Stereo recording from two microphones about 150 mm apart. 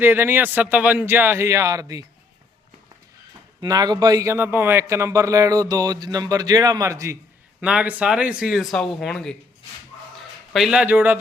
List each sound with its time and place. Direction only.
0.0 s a man's voice: 15° right (ahead or behind)
3.6 s speech: 25° right (ahead or behind)
7.6 s a man's voice: 10° right (ahead or behind)